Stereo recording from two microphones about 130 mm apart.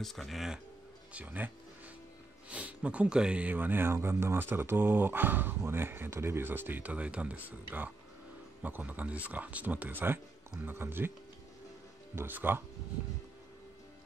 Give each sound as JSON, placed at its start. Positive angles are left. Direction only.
{"t": 0.0, "sound": "speech", "side_deg": 0}
{"t": 1.1, "sound": "speech", "side_deg": -15}
{"t": 2.5, "sound": "speech", "side_deg": -10}
{"t": 12.2, "sound": "speech", "side_deg": -15}